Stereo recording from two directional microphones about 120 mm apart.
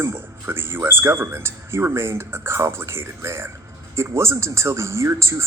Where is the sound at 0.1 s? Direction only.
20° right (ahead or behind).